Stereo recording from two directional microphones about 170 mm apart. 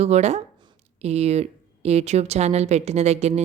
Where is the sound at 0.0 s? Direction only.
40° right (ahead or behind).